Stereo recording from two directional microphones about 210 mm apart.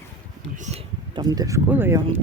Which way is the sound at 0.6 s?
30° right (ahead or behind).